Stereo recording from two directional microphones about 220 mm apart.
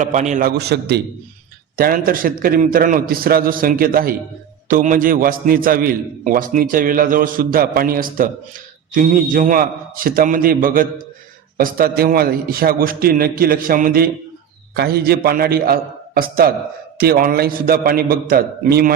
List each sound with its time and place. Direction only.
0.0 s a man's voice: 30° right (ahead or behind)